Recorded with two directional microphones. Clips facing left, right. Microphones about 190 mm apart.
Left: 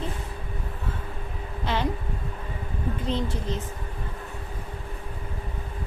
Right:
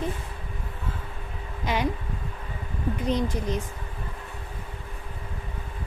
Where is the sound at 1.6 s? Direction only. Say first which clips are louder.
Right 1 dB; 15° right (ahead or behind).